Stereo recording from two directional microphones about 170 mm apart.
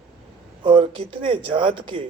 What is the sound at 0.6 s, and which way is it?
Speech, 30° right (ahead or behind).